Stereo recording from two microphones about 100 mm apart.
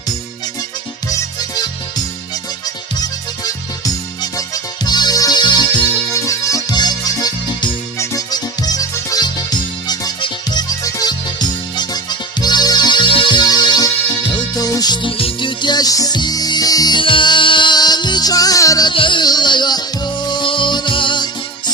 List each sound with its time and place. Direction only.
1.1 s music: 35° left (ahead or behind)
3.0 s music: 40° left (ahead or behind)
6.1 s music: 35° left (ahead or behind)
15.0 s music: 55° left (ahead or behind); by 17.0 s 40° left (ahead or behind)
17.0 s music: 55° left (ahead or behind); by 18.9 s 35° left (ahead or behind)
18.9 s music: 55° left (ahead or behind)